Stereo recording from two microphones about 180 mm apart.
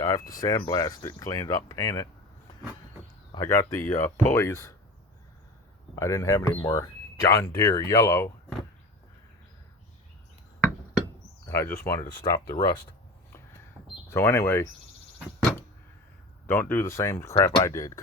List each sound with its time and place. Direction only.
0.0 s speech: 20° left (ahead or behind)
3.3 s speech: 20° left (ahead or behind)
6.0 s speech: 15° left (ahead or behind)
11.4 s speech: 15° left (ahead or behind)
14.1 s speech: 15° left (ahead or behind)
16.5 s speech: 10° left (ahead or behind)